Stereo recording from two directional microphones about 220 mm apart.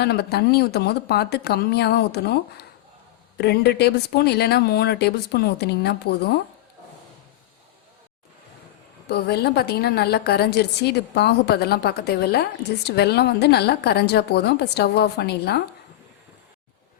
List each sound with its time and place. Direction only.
0.0 s a woman's voice: 45° left (ahead or behind)
9.0 s a woman's voice: 50° left (ahead or behind)